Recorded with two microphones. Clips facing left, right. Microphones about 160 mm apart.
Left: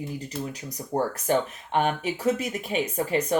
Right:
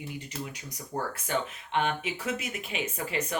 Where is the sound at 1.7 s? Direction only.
40° left (ahead or behind).